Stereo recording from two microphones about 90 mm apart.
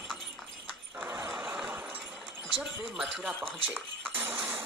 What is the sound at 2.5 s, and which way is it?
Speech, 5° right (ahead or behind).